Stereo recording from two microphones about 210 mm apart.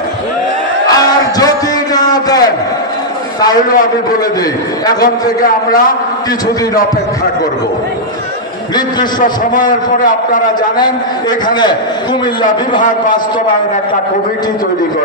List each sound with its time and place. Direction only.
2.0 s a sound: 20° left (ahead or behind)
3.6 s a man's voice: 40° left (ahead or behind)
5.4 s a man's voice: 40° left (ahead or behind)
9.2 s a man's voice: 40° left (ahead or behind)
12.4 s a man's voice: 40° left (ahead or behind)